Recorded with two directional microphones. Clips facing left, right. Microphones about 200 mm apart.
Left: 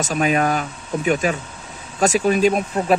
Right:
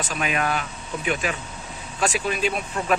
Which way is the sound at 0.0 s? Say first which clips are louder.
Left 7 dB; 40° left (ahead or behind).